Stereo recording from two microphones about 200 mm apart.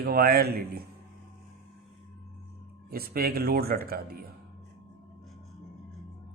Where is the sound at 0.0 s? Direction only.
50° right (ahead or behind).